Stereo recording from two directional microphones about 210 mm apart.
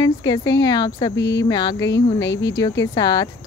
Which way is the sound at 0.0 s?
20° left (ahead or behind).